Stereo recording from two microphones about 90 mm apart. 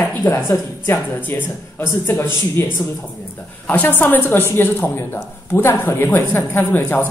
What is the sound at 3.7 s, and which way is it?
Speech, 20° left (ahead or behind).